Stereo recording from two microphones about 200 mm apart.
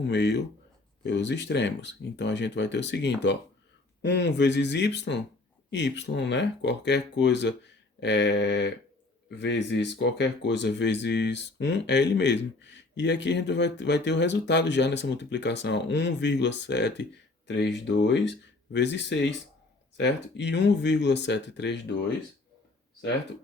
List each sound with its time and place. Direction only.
0.1 s speech: 60° left (ahead or behind)